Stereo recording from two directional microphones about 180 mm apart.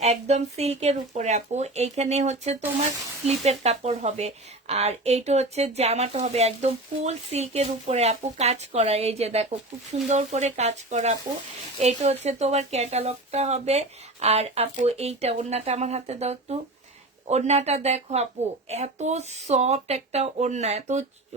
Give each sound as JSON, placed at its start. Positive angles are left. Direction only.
{"t": 0.0, "sound": "speech", "side_deg": -35}